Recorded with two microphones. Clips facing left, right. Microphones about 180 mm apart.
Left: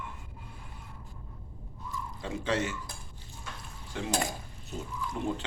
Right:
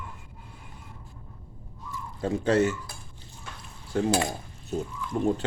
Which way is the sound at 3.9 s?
45° right (ahead or behind).